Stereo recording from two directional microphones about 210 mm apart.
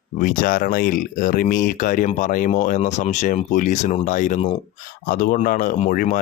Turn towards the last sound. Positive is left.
turn(degrees=40)  # may be behind; listen again after turning